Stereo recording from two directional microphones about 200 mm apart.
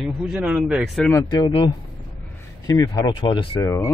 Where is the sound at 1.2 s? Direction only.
20° left (ahead or behind).